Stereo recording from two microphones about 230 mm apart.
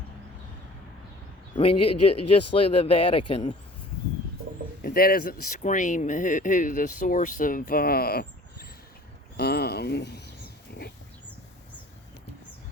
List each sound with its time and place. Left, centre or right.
1.5 s speech: left
1.8 s speech: left
2.5 s speech: left
4.8 s speech: left
9.4 s a sound: left